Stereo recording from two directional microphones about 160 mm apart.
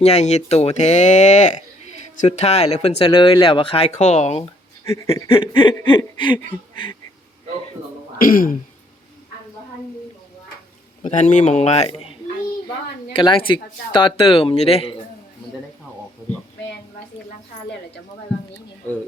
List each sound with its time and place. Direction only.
0.0 s speech: 45° left (ahead or behind)
3.1 s speech: 30° left (ahead or behind)
5.3 s a sound: 30° left (ahead or behind)
8.2 s speech: 60° left (ahead or behind)
11.0 s speech: 50° left (ahead or behind)
13.1 s speech: 30° left (ahead or behind)